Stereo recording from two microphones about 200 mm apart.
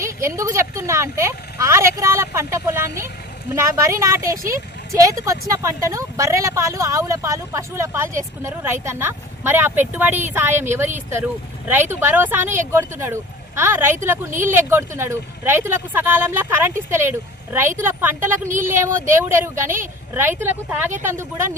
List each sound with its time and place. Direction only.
0.0 s a woman's voice: 15° right (ahead or behind)
18.4 s speech: 40° right (ahead or behind)
18.7 s a woman's voice: 10° right (ahead or behind)